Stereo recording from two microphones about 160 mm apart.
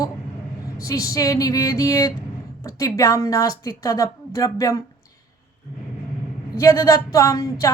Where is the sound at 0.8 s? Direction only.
20° left (ahead or behind).